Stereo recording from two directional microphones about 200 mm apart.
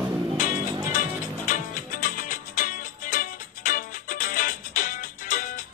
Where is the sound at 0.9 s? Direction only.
40° left (ahead or behind).